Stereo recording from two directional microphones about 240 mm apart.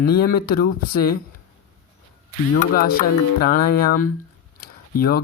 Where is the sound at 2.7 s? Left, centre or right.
Left.